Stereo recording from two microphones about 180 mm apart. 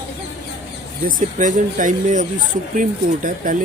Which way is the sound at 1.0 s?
45° right (ahead or behind).